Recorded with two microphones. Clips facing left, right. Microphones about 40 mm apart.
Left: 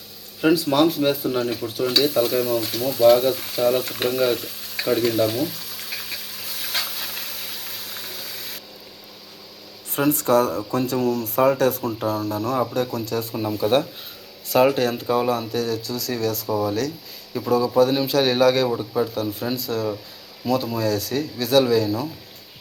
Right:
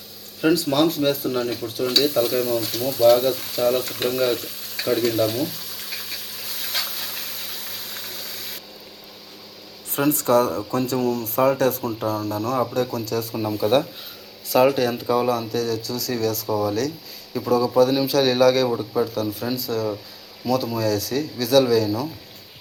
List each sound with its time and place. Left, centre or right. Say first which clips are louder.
0.4 s speech: left 1 dB; centre
9.9 s speech: even; centre
14.8 s speech: even; centre
15.1 s speech: right 1 dB; centre